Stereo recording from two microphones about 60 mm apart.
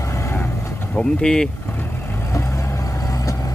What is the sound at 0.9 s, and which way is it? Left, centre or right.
Speech, centre.